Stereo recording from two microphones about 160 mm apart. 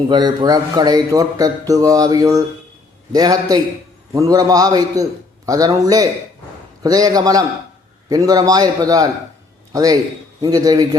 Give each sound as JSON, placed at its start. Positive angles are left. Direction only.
{"t": 0.1, "sound": "speech", "side_deg": -25}